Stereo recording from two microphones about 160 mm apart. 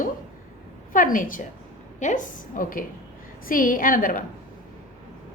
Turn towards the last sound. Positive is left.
turn(degrees=60)  # may be behind; listen again after turning